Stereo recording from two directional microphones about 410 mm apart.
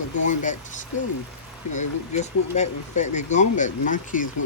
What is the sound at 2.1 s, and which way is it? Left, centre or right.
Speech, centre.